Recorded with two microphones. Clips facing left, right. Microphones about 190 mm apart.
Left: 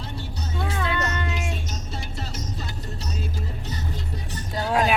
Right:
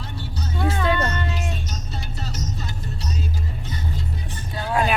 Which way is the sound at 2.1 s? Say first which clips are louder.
Right 4 dB; 30° left (ahead or behind).